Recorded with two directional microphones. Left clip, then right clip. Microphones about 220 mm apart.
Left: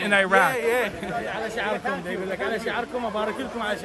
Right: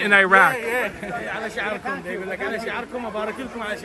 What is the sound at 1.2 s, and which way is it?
Speech, 45° left (ahead or behind).